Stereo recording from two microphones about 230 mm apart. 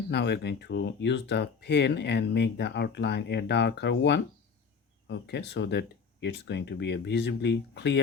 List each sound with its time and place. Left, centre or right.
0.1 s speech: left